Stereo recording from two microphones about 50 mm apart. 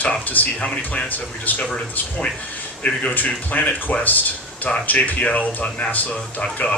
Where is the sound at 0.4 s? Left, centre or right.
Left.